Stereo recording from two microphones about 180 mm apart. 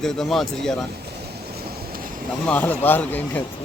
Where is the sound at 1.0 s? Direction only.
60° right (ahead or behind).